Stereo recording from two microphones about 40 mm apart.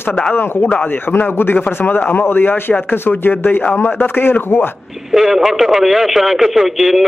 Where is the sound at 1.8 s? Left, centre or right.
Left.